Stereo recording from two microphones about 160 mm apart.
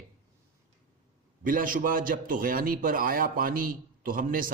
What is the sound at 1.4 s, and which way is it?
A man's voice, 60° right (ahead or behind).